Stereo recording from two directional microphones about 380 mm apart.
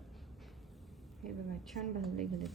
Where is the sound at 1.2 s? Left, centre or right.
Centre.